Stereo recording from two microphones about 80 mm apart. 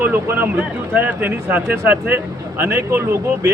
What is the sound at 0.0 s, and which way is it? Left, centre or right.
Speech, right.